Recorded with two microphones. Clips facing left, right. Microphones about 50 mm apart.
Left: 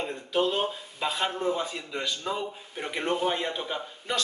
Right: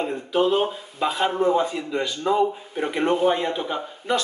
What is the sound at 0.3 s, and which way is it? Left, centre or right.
Speech, centre.